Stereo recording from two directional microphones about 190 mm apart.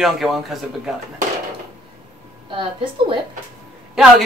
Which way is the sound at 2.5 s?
25° right (ahead or behind).